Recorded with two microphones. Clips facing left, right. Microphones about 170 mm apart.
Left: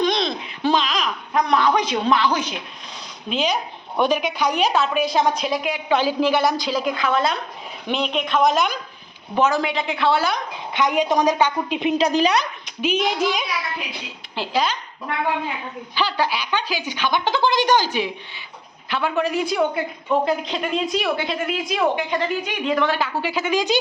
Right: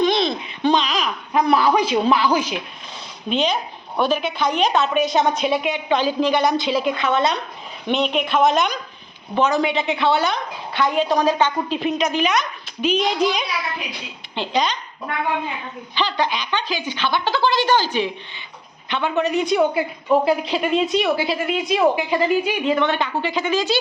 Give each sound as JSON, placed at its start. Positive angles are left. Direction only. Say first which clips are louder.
{"t": 0.0, "sound": "babbling", "louder": "right 2 dB", "side_deg": 0}
{"t": 3.2, "sound": "a woman's voice", "louder": "right 2 dB", "side_deg": 5}
{"t": 10.3, "sound": "a woman's voice", "louder": "even", "side_deg": 15}
{"t": 11.9, "sound": "a woman's voice", "louder": "left 4 dB", "side_deg": 35}
{"t": 12.6, "sound": "a woman's voice", "louder": "right 1 dB", "side_deg": 10}
{"t": 16.0, "sound": "a woman's voice", "louder": "even", "side_deg": 5}